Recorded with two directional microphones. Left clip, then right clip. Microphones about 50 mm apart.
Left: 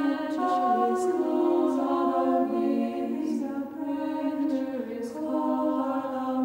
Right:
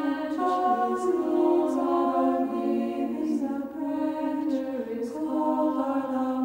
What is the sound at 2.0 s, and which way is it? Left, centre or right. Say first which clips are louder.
Choir: even; centre.